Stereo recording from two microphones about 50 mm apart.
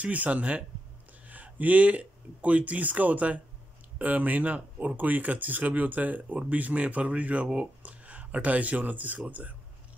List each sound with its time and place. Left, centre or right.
0.0 s speech: right